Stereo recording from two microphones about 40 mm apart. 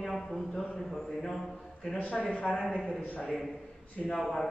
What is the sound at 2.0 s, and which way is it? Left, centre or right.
Speech, left.